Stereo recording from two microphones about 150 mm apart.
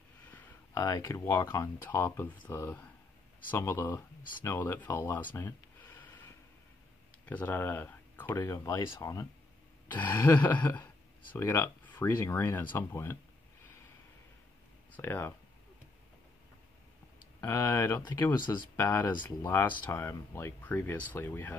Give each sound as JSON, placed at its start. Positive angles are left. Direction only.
{"t": 0.7, "sound": "speech", "side_deg": 25}
{"t": 7.2, "sound": "speech", "side_deg": 10}
{"t": 15.0, "sound": "speech", "side_deg": 15}
{"t": 17.4, "sound": "speech", "side_deg": 20}
{"t": 19.2, "sound": "speech", "side_deg": 15}